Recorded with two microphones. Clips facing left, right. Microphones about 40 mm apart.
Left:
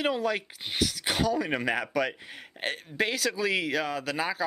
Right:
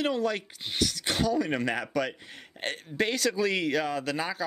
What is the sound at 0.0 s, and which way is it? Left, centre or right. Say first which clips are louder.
Speech: even; centre.